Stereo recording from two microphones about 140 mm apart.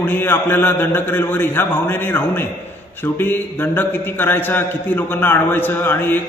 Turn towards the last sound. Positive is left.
turn(degrees=15)  # may be behind; listen again after turning